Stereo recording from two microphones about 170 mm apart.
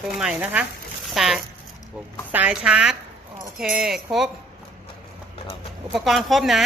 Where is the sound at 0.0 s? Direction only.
5° right (ahead or behind).